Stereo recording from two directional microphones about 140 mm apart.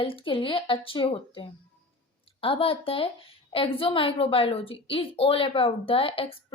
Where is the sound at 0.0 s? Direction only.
40° left (ahead or behind).